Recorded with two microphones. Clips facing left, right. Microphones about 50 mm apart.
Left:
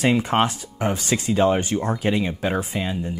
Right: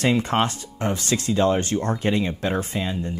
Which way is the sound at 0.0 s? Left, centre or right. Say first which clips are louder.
Left 1 dB; centre.